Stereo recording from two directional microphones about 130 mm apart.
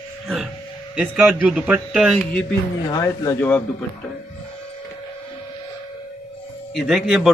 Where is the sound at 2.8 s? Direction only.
25° left (ahead or behind).